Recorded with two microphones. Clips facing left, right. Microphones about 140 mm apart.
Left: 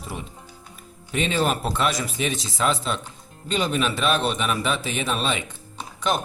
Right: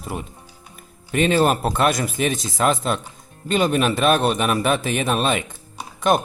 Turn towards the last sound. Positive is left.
turn(degrees=-50)  # may be behind; listen again after turning